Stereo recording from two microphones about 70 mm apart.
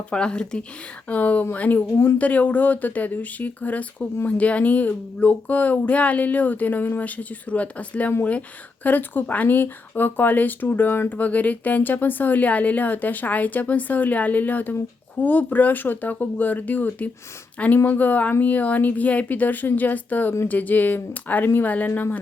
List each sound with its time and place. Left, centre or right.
0.1 s speech: centre